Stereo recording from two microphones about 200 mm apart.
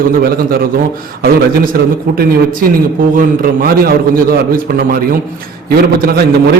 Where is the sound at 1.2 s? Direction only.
45° right (ahead or behind).